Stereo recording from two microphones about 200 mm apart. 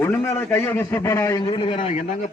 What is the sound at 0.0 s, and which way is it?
A man's voice, 10° left (ahead or behind).